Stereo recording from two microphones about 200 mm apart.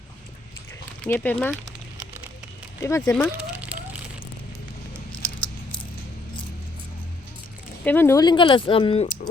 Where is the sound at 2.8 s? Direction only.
15° left (ahead or behind).